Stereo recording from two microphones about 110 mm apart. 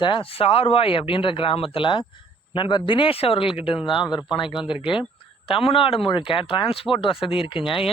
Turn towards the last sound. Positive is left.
turn(degrees=50)  # may be behind; listen again after turning